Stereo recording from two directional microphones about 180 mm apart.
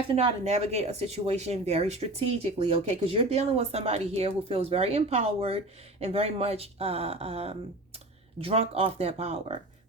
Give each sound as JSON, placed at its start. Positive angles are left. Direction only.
{"t": 0.2, "sound": "speech", "side_deg": -35}